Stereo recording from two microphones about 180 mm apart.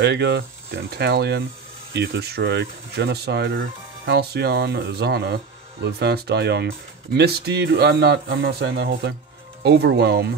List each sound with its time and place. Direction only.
0.0 s speech: 75° right (ahead or behind)
4.0 s speech: 60° right (ahead or behind)